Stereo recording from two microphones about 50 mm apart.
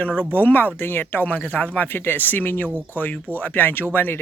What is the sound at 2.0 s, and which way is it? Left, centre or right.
Speech, left.